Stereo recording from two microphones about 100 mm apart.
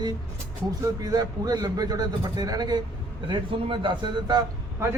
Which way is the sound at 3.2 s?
55° right (ahead or behind).